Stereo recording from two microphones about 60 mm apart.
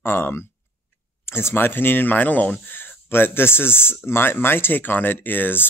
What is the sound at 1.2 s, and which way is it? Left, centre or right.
Speech, left.